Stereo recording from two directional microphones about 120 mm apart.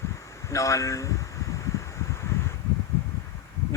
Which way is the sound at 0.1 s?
25° left (ahead or behind).